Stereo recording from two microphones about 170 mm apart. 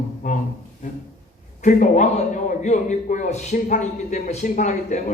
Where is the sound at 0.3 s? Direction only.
45° left (ahead or behind).